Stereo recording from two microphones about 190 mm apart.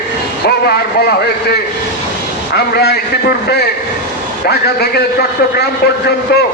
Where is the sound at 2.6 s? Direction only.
60° left (ahead or behind).